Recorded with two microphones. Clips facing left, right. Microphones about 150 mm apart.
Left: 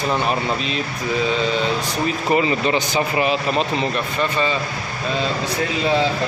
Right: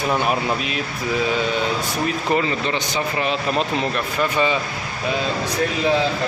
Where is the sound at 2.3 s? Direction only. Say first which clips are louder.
Left 4 dB; 10° left (ahead or behind).